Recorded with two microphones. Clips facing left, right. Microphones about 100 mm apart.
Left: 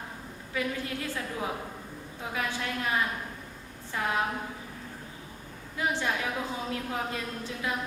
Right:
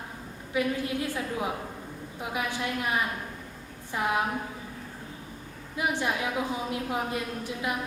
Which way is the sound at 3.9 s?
15° right (ahead or behind).